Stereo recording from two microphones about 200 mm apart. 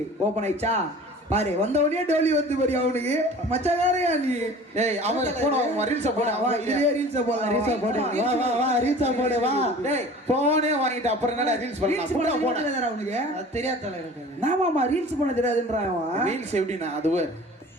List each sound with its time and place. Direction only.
0.3 s a man's voice: 35° right (ahead or behind)
16.1 s a man's voice: 35° right (ahead or behind)